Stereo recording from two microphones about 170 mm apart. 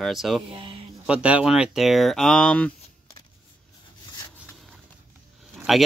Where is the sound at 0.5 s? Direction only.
30° right (ahead or behind).